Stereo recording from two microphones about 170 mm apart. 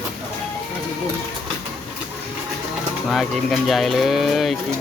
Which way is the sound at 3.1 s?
Centre (ahead or behind).